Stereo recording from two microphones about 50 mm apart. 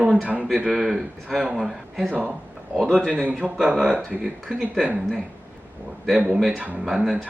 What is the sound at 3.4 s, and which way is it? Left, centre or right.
Speech, left.